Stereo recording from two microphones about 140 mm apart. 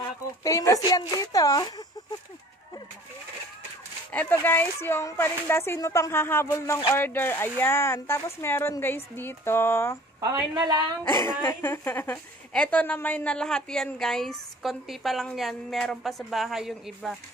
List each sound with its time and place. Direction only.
0.4 s speech: 25° left (ahead or behind)
4.1 s a woman's voice: 10° left (ahead or behind)
10.5 s a woman's voice: 30° right (ahead or behind)
11.4 s a woman's voice: 15° left (ahead or behind); by 17.2 s centre (ahead or behind)